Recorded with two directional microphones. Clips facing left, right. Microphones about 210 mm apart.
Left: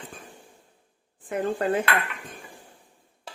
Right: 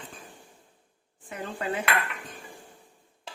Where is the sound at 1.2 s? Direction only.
50° left (ahead or behind).